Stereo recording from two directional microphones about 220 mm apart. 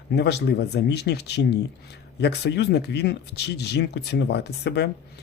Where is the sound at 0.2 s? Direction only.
50° left (ahead or behind).